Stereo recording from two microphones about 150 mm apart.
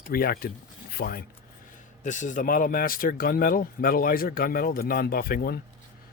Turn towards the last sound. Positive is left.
turn(degrees=80)